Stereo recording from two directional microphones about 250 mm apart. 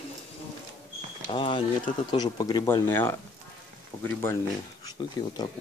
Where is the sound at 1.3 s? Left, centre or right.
Centre.